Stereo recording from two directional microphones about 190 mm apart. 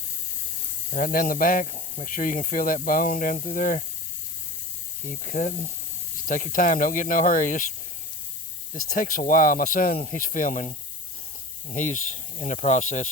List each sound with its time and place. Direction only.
0.9 s speech: 45° left (ahead or behind)
5.0 s speech: 45° left (ahead or behind)
8.9 s speech: 45° left (ahead or behind)